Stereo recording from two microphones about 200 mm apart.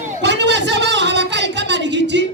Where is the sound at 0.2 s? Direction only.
60° right (ahead or behind).